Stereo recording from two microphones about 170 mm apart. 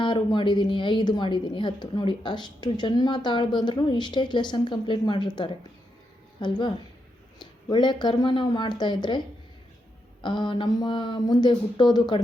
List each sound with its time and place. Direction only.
0.0 s a woman's voice: 30° left (ahead or behind)